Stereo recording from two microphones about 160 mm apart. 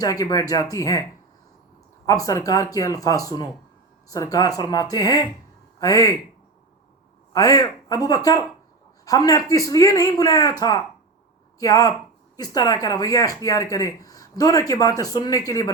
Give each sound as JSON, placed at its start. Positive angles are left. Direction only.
{"t": 0.0, "sound": "speech", "side_deg": 25}
{"t": 2.0, "sound": "speech", "side_deg": 20}
{"t": 7.3, "sound": "speech", "side_deg": 20}